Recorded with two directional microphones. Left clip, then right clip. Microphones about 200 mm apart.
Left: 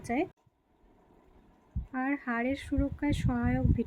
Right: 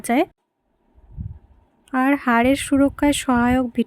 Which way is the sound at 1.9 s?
60° right (ahead or behind).